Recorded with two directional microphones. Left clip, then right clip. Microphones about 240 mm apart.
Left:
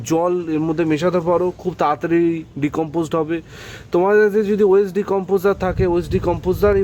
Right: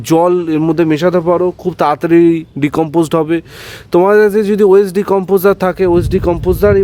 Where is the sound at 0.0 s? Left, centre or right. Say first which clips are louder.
Right 8 dB; right.